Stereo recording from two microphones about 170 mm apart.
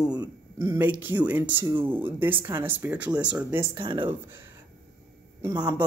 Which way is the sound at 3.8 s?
30° right (ahead or behind).